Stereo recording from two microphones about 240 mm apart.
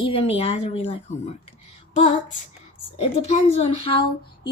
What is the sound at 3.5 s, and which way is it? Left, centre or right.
Speech, left.